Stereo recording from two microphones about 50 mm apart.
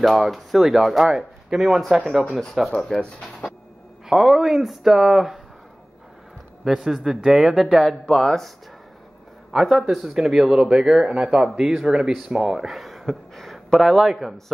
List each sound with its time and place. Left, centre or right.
0.0 s speech: centre
2.9 s speech: centre
4.1 s speech: centre
6.6 s speech: centre
8.1 s speech: centre
9.5 s speech: centre
11.1 s speech: centre
11.4 s speech: centre